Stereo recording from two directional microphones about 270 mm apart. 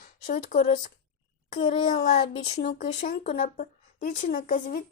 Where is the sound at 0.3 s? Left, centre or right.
Left.